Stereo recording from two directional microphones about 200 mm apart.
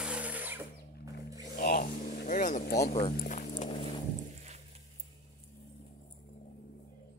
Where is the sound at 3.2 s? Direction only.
35° left (ahead or behind).